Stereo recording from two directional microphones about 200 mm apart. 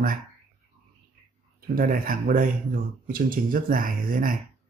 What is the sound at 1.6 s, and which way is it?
Speech, 45° right (ahead or behind).